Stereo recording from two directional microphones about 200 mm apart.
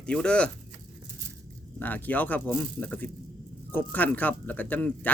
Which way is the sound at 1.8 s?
10° left (ahead or behind).